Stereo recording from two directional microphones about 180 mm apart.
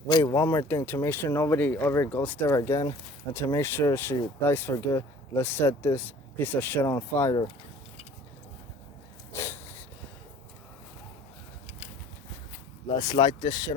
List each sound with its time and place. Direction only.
0.1 s speech: 20° left (ahead or behind)
9.3 s a sound: 15° left (ahead or behind)
12.9 s speech: 25° left (ahead or behind)